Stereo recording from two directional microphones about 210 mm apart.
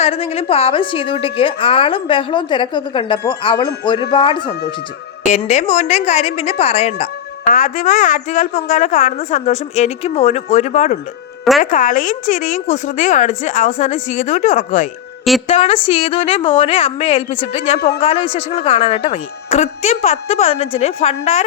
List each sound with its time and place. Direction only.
0.0 s a woman's voice: 30° left (ahead or behind)
5.3 s a woman's voice: 35° left (ahead or behind)